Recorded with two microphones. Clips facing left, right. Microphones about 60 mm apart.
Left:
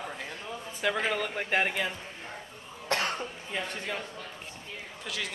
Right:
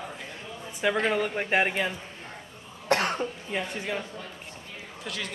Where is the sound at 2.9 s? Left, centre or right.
Right.